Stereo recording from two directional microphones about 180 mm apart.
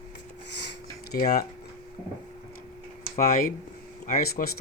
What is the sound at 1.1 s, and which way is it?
Speech, 55° left (ahead or behind).